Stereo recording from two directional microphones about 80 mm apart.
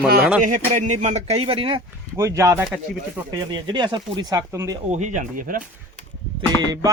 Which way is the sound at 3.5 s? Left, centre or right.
Right.